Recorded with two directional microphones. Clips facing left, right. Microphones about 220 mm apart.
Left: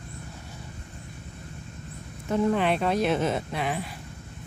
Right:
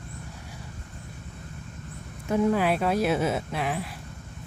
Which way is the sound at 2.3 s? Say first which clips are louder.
Right 1 dB; 5° right (ahead or behind).